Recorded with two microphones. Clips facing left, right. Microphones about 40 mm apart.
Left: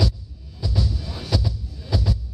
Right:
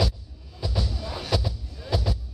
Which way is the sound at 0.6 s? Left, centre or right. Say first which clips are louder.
Left 3 dB; centre.